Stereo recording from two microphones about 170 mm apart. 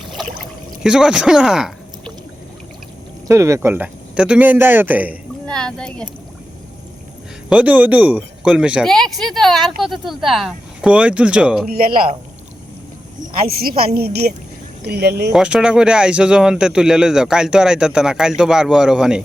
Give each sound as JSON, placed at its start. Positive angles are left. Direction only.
{"t": 0.8, "sound": "speech", "side_deg": -5}
{"t": 3.2, "sound": "speech", "side_deg": -15}
{"t": 5.5, "sound": "speech", "side_deg": 5}
{"t": 7.5, "sound": "speech", "side_deg": -10}
{"t": 11.7, "sound": "a woman's voice", "side_deg": -60}
{"t": 13.6, "sound": "a woman's voice", "side_deg": -60}
{"t": 15.3, "sound": "speech", "side_deg": -5}